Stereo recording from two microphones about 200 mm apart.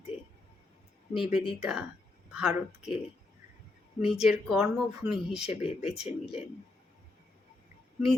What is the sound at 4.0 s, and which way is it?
Speech, centre (ahead or behind).